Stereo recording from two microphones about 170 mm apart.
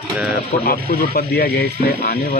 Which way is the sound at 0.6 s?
60° left (ahead or behind).